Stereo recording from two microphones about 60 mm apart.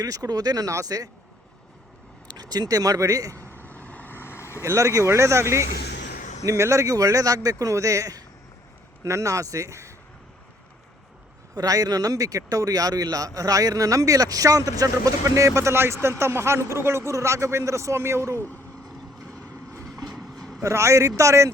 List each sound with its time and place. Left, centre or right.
0.0 s speech: right
2.4 s speech: right
3.3 s vehicle: left
4.6 s speech: right
9.0 s speech: right
11.5 s speech: right
18.3 s speech: left
19.4 s vehicle: right
20.6 s speech: right